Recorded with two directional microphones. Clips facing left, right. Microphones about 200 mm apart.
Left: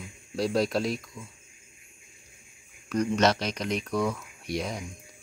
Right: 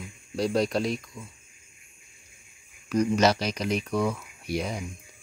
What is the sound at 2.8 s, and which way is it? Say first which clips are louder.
Speech: right 2 dB; 5° right (ahead or behind).